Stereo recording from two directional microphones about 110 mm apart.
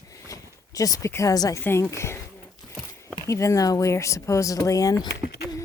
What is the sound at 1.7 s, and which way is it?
Speech, 20° left (ahead or behind).